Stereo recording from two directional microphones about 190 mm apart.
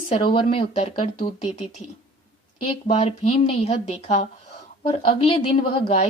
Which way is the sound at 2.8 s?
35° left (ahead or behind).